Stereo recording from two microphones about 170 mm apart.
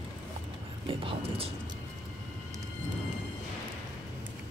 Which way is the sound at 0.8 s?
35° right (ahead or behind).